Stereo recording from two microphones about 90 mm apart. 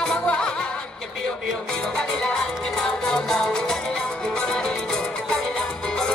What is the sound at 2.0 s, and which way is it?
Music, 10° left (ahead or behind).